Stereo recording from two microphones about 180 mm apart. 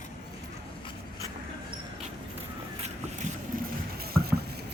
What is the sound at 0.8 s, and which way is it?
Vehicle, 25° left (ahead or behind).